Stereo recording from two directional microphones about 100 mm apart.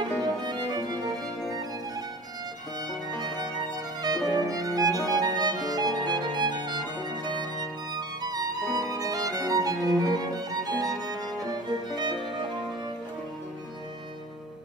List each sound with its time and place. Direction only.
0.0 s music: 45° right (ahead or behind)
3.2 s music: 45° right (ahead or behind)